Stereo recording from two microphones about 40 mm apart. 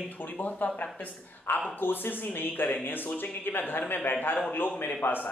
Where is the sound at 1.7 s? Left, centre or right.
Left.